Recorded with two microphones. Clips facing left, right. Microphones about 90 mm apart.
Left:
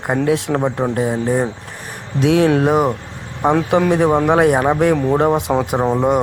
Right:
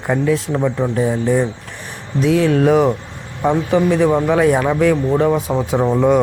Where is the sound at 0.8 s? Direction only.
40° left (ahead or behind).